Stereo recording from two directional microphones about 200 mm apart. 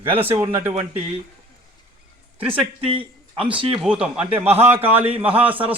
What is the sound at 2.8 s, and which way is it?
Speech, 25° right (ahead or behind).